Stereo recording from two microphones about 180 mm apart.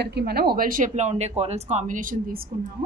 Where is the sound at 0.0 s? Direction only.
60° right (ahead or behind).